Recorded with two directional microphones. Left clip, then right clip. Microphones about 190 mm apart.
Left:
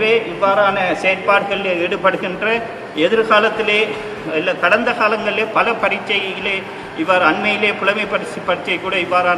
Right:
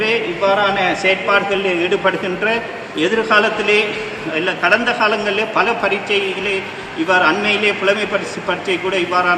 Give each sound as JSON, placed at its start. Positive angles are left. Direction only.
{"t": 0.0, "sound": "a man's voice", "side_deg": 5}
{"t": 9.0, "sound": "a man's voice", "side_deg": 5}